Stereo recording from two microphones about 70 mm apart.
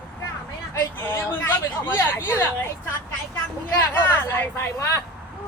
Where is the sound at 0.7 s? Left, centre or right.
Left.